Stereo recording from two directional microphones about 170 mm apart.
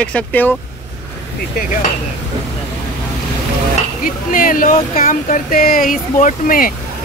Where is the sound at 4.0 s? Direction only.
55° left (ahead or behind).